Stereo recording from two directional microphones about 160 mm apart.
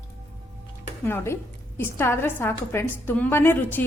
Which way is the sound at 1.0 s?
15° left (ahead or behind).